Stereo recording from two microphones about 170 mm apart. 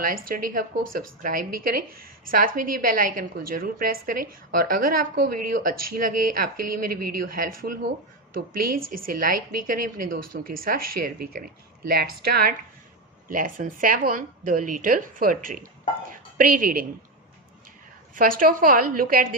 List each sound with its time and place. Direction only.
0.0 s a woman's voice: 55° right (ahead or behind)
18.1 s a woman's voice: 55° right (ahead or behind)